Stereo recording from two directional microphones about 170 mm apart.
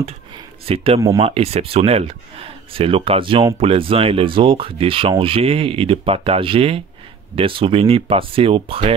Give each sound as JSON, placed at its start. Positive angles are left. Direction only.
{"t": 0.7, "sound": "speech", "side_deg": -35}